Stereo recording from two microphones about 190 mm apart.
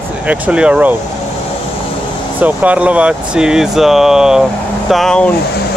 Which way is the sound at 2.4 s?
10° right (ahead or behind).